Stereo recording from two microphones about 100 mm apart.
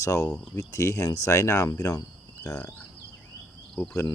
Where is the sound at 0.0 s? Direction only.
35° left (ahead or behind).